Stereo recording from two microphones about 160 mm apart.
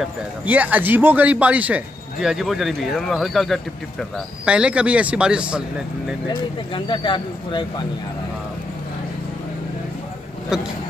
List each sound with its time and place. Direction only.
0.5 s speech: 10° right (ahead or behind)
6.7 s speech: 30° left (ahead or behind)
10.5 s speech: 5° right (ahead or behind)